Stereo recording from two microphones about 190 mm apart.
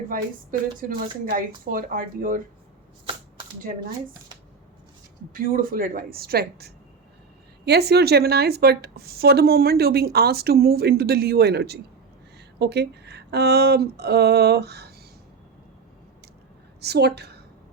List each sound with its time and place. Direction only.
0.1 s speech: 45° right (ahead or behind)
5.3 s speech: 50° right (ahead or behind)
16.8 s speech: 60° right (ahead or behind)